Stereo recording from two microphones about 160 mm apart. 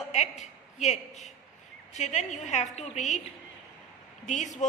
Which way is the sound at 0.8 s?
45° left (ahead or behind).